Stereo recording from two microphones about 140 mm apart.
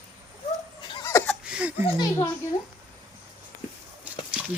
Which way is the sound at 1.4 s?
10° right (ahead or behind).